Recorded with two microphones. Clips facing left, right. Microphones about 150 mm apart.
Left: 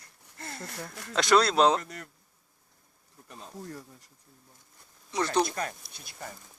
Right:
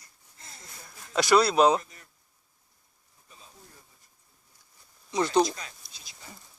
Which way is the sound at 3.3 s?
70° left (ahead or behind).